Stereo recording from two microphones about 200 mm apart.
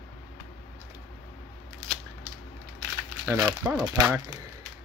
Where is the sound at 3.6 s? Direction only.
10° right (ahead or behind).